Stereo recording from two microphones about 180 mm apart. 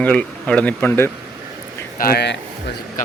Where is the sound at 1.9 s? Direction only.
60° left (ahead or behind).